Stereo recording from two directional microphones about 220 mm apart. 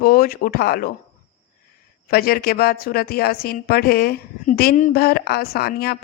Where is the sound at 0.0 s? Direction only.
40° left (ahead or behind).